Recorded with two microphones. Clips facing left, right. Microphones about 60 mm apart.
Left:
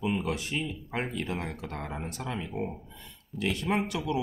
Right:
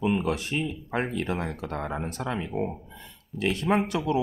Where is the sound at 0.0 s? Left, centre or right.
Right.